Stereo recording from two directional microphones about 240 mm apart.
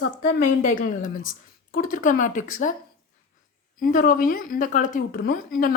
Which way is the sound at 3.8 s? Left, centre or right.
Left.